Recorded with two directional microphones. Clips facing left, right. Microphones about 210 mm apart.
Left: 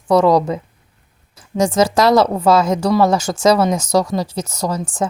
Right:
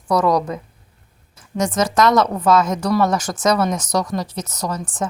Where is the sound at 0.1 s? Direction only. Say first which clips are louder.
Left 5 dB; 25° left (ahead or behind).